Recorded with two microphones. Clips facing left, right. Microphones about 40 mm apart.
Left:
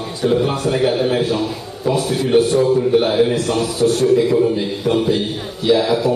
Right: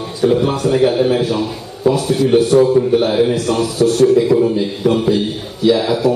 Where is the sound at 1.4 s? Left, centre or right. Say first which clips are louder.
Right 4 dB; centre.